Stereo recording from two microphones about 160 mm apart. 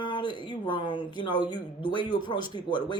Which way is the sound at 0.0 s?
30° left (ahead or behind).